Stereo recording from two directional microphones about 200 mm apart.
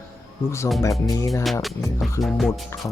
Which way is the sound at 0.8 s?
15° left (ahead or behind).